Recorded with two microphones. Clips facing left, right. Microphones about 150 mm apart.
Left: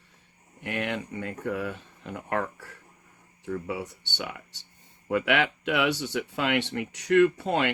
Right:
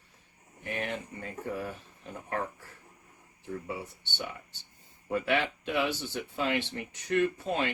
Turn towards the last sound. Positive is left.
turn(degrees=75)  # may be behind; listen again after turning